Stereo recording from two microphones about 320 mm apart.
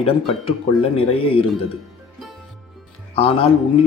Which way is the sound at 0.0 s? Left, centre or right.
Centre.